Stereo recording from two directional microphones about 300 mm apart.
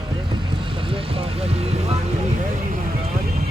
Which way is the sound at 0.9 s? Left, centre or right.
Centre.